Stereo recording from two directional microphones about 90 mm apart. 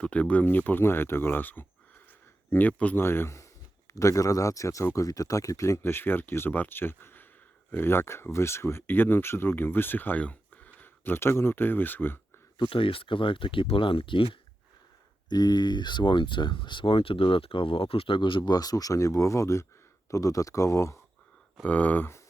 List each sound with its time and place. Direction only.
0.0 s speech: 15° left (ahead or behind)
12.5 s speech: 70° left (ahead or behind)
15.3 s speech: 50° left (ahead or behind); by 21.0 s 35° left (ahead or behind)
21.6 s speech: 15° left (ahead or behind)